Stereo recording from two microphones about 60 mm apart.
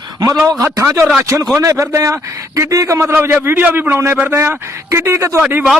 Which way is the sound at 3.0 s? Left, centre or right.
Right.